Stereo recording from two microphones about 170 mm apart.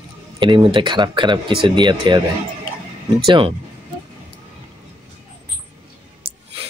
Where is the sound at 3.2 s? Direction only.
30° right (ahead or behind).